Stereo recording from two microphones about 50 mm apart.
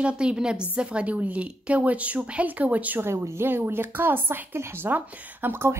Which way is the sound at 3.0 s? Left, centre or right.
Right.